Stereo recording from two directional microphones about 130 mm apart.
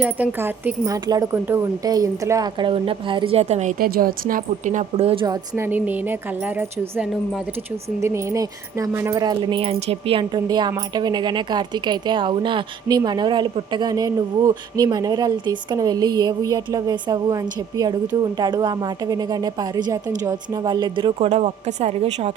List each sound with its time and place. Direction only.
0.0 s a woman's voice: 15° right (ahead or behind)
1.0 s speech: 30° right (ahead or behind)
1.3 s speech: 20° right (ahead or behind)
2.6 s a woman's voice: 45° right (ahead or behind)
5.5 s a woman's voice: 15° right (ahead or behind); by 21.1 s 35° right (ahead or behind)
21.2 s speech: 55° right (ahead or behind)